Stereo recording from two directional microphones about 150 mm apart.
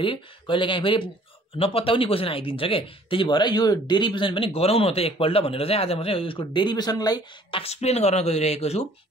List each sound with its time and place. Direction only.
0.0 s speech: 35° left (ahead or behind)
7.6 s speech: 45° left (ahead or behind)